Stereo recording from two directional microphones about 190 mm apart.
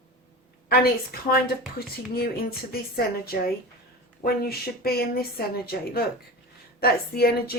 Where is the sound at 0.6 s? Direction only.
55° left (ahead or behind).